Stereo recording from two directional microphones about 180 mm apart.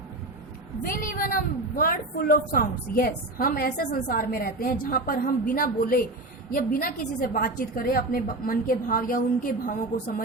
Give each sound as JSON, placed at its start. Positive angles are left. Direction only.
{"t": 0.9, "sound": "a woman's voice", "side_deg": 50}